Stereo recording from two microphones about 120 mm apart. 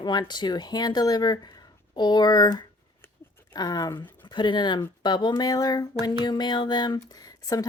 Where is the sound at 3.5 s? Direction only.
35° left (ahead or behind).